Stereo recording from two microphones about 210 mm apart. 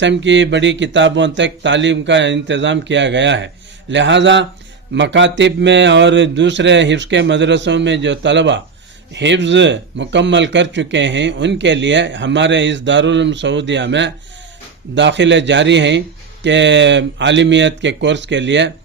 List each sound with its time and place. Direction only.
0.0 s speech: 60° right (ahead or behind)